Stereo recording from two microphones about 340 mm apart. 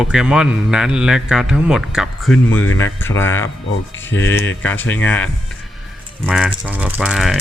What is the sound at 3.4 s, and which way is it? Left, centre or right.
Speech, left.